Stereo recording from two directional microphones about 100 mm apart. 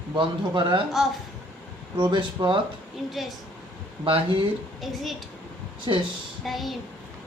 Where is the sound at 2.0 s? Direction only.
50° right (ahead or behind).